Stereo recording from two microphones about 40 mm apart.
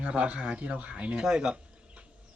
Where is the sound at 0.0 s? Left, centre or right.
Right.